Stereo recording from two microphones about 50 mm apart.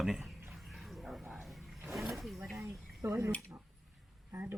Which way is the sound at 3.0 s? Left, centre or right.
Right.